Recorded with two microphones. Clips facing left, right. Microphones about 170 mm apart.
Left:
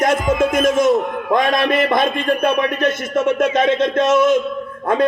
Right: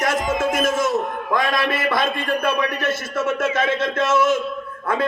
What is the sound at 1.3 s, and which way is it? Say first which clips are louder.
Speech: left 5 dB; 20° left (ahead or behind).